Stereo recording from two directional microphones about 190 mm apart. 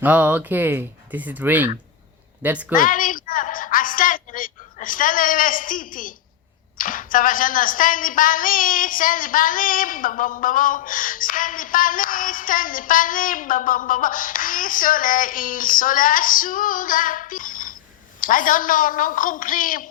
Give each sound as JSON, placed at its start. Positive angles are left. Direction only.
{"t": 0.0, "sound": "speech", "side_deg": -10}
{"t": 2.7, "sound": "a woman's voice", "side_deg": 45}